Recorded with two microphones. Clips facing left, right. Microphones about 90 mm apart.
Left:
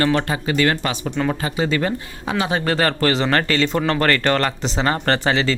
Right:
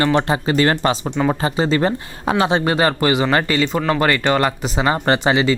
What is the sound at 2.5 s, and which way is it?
Speech, 15° right (ahead or behind).